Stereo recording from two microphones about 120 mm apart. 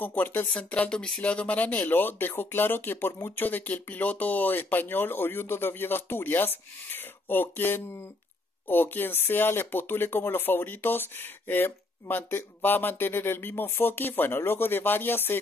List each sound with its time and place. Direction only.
0.0 s speech: 15° left (ahead or behind)